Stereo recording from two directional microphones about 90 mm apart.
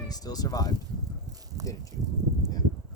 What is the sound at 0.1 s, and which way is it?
Speech, 45° left (ahead or behind).